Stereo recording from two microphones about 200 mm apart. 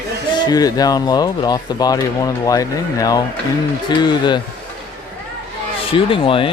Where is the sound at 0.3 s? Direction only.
20° left (ahead or behind).